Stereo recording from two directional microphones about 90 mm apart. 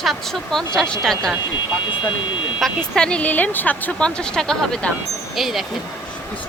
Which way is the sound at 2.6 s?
5° left (ahead or behind).